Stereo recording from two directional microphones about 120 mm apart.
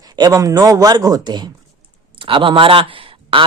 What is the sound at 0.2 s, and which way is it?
A man's voice, 30° right (ahead or behind).